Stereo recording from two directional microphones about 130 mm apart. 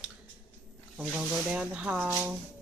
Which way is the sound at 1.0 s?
5° right (ahead or behind).